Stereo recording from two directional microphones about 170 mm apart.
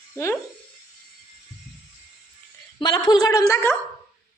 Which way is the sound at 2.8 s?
25° left (ahead or behind).